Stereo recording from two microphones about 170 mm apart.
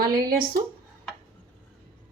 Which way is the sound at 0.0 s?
60° right (ahead or behind).